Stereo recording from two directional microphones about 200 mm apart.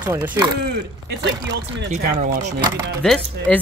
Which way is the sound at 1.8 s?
40° right (ahead or behind).